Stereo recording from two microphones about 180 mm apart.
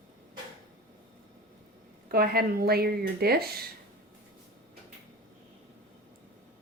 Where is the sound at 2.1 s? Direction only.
55° right (ahead or behind).